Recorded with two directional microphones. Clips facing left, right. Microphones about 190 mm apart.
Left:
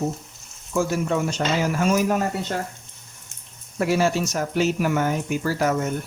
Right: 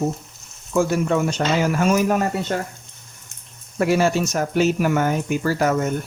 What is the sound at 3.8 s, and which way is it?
Speech, 60° right (ahead or behind).